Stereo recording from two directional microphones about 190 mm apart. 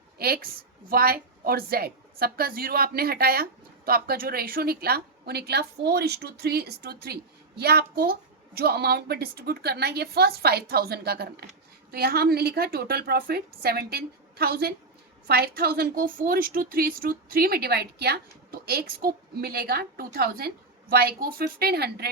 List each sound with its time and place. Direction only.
0.2 s a woman's voice: 55° right (ahead or behind)